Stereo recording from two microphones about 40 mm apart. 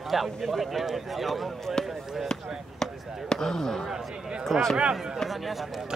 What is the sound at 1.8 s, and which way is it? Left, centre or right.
Speech, centre.